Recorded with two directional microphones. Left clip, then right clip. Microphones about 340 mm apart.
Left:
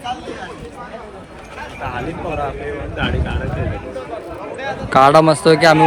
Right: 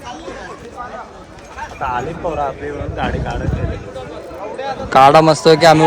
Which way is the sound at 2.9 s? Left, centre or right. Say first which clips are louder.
Right 2 dB; centre.